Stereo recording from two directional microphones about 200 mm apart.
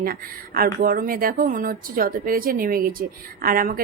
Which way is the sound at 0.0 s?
45° right (ahead or behind).